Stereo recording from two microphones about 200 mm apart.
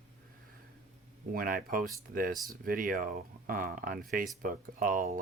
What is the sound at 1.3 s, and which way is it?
Speech, 45° right (ahead or behind).